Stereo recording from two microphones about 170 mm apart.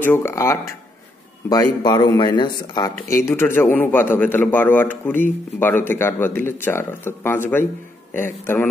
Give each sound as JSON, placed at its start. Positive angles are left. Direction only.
{"t": 0.0, "sound": "speech", "side_deg": 15}
{"t": 3.3, "sound": "speech", "side_deg": 15}